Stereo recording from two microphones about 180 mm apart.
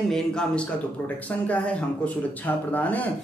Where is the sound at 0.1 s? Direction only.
5° left (ahead or behind).